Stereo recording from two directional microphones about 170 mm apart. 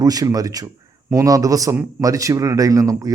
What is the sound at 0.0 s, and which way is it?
Speech, 20° right (ahead or behind).